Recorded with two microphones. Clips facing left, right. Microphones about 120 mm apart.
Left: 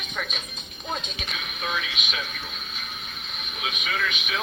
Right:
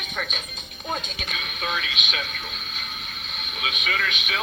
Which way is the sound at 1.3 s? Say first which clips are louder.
Right 1 dB; 70° right (ahead or behind).